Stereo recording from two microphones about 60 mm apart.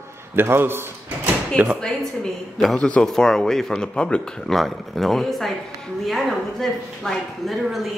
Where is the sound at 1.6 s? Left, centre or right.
Right.